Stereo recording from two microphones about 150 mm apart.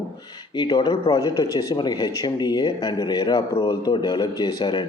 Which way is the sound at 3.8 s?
25° left (ahead or behind).